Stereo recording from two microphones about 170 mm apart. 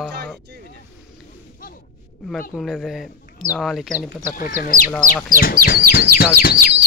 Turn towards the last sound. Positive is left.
turn(degrees=60)  # may be behind; listen again after turning